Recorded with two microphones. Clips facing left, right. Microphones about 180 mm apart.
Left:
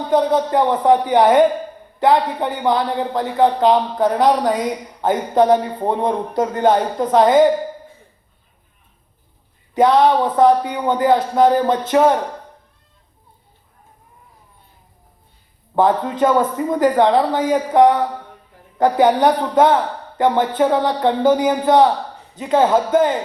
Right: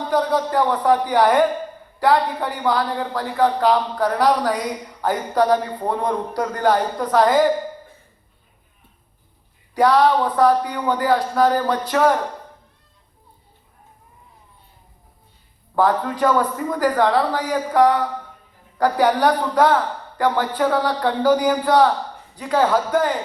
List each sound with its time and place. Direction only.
0.1 s speech: 20° left (ahead or behind)
9.7 s speech: 20° left (ahead or behind)
15.7 s speech: 20° left (ahead or behind)